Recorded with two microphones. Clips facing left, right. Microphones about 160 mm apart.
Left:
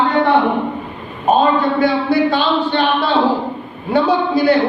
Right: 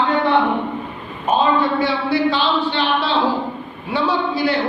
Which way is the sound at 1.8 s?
50° left (ahead or behind).